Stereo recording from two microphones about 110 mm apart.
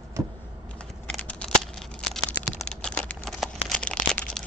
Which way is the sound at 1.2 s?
10° left (ahead or behind).